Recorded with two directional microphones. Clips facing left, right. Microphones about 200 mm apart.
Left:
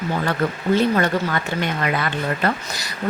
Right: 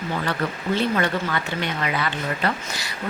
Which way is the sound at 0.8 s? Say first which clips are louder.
Left 3 dB; 45° left (ahead or behind).